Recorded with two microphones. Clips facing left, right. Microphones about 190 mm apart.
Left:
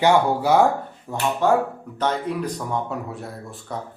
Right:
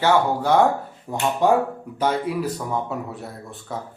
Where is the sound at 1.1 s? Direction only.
15° right (ahead or behind).